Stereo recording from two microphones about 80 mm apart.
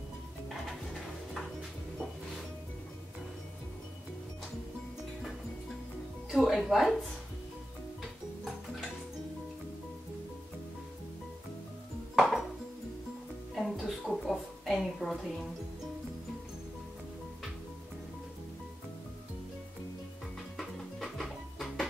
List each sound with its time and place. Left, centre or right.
6.3 s speech: centre
12.2 s music: centre
13.6 s a sound: centre
20.5 s music: centre